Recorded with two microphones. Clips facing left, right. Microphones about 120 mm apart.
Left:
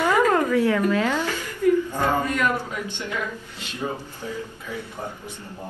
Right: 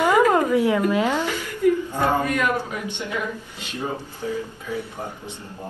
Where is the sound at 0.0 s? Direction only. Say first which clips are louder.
Right 2 dB; 15° right (ahead or behind).